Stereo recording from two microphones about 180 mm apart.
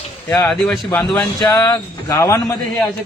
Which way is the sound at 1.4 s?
20° left (ahead or behind).